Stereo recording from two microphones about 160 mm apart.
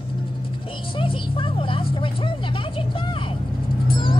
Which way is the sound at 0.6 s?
35° left (ahead or behind).